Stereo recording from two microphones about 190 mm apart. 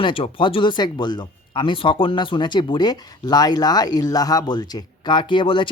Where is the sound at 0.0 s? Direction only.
25° left (ahead or behind).